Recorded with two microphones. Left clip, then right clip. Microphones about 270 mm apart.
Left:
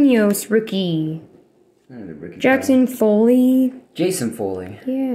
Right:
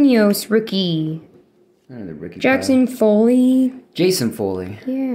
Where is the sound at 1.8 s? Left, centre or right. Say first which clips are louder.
Right 2 dB; right.